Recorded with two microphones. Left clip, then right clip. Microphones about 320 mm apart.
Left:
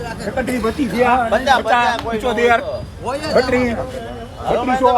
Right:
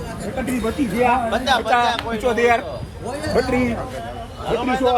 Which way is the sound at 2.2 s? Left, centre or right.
Centre.